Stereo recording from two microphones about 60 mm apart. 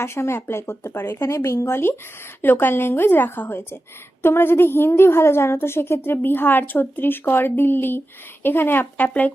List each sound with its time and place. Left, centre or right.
0.0 s a woman's voice: left